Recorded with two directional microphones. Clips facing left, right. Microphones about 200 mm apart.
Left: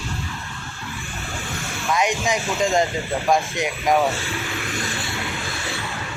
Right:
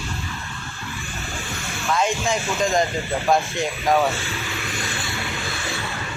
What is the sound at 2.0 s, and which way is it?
Speech, 15° left (ahead or behind).